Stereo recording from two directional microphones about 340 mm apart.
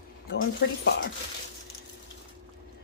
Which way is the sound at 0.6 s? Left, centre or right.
Left.